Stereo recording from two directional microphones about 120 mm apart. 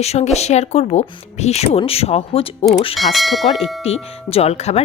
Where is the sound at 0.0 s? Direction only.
65° left (ahead or behind).